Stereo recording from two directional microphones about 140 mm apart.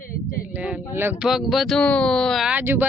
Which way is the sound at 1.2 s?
Centre (ahead or behind).